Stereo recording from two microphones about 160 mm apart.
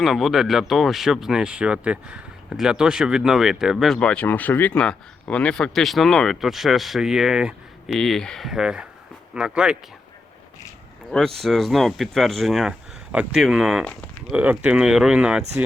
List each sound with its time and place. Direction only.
0.0 s speech: centre (ahead or behind)
11.1 s speech: centre (ahead or behind)